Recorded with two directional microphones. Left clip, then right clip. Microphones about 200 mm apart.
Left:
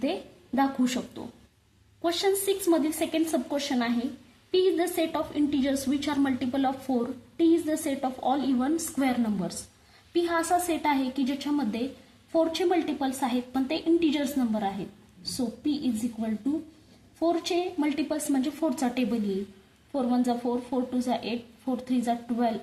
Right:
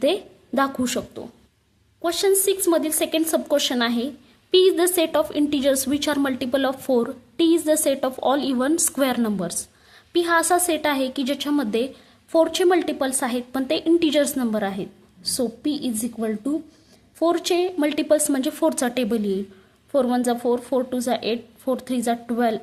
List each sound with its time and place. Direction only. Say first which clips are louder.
0.0 s a woman's voice: right 9 dB; 35° right (ahead or behind)